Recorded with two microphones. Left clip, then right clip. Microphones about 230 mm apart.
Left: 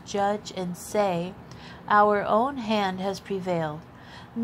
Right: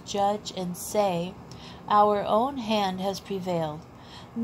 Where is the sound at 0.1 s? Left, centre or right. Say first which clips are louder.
Even; left.